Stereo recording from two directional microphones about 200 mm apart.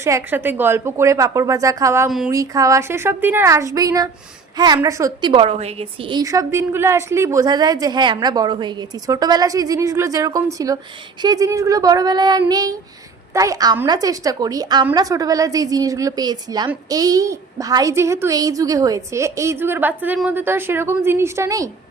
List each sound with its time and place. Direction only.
0.0 s a woman's voice: 15° right (ahead or behind)
2.0 s speech: centre (ahead or behind)
2.3 s a woman's voice: 15° right (ahead or behind)